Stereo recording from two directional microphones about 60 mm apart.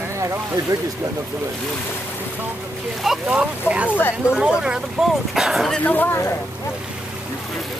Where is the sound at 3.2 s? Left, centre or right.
Centre.